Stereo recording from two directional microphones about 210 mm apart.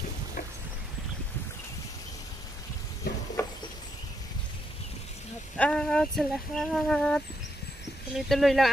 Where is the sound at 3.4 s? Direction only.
15° left (ahead or behind).